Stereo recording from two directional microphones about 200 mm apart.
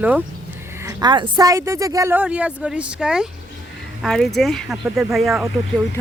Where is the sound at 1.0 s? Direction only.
20° right (ahead or behind).